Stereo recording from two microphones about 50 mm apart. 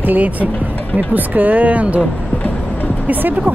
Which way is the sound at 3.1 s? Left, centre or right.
Right.